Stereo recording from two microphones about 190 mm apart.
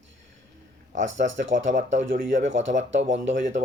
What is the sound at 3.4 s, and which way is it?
Speech, 40° right (ahead or behind).